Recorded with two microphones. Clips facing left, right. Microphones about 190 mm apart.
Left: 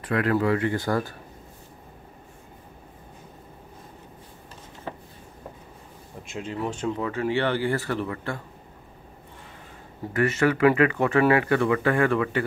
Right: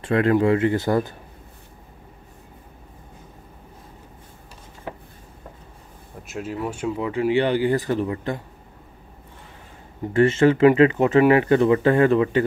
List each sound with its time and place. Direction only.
0.0 s speech: 25° right (ahead or behind)
6.2 s speech: 5° right (ahead or behind)
10.1 s speech: 25° right (ahead or behind)